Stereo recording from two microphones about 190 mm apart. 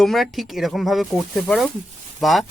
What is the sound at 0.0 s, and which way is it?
Speech, centre (ahead or behind).